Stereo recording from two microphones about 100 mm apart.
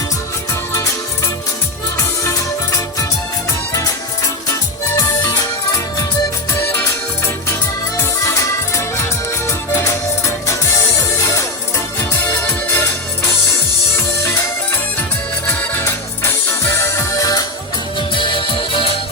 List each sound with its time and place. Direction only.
2.0 s music: 30° left (ahead or behind)
5.4 s music: 35° left (ahead or behind)
6.5 s music: 25° left (ahead or behind)
7.9 s music: 30° left (ahead or behind)
12.2 s music: 20° left (ahead or behind)
15.4 s music: 25° left (ahead or behind)
18.1 s music: 55° left (ahead or behind)